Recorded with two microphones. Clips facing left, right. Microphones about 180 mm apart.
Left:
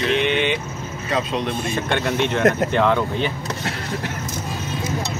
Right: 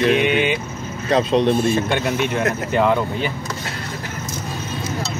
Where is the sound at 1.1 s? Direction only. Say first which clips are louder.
Right 7 dB; 30° right (ahead or behind).